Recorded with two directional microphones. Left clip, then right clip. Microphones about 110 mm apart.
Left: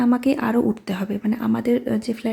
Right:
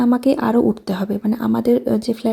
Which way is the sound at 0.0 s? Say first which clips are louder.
Right 3 dB; 25° right (ahead or behind).